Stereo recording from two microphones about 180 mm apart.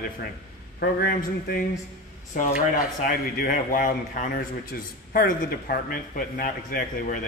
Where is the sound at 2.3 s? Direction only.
45° left (ahead or behind).